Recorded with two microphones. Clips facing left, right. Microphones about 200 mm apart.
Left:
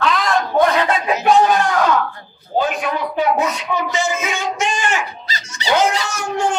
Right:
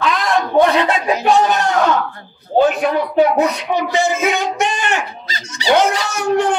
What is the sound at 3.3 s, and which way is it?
Speech, 60° right (ahead or behind).